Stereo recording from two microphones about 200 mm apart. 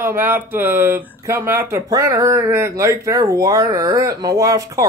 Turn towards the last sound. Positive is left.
turn(degrees=-15)  # may be behind; listen again after turning